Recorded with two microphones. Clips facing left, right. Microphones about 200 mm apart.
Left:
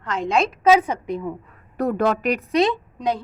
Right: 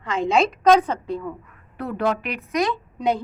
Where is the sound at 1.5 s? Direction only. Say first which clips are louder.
Left 7 dB; 45° left (ahead or behind).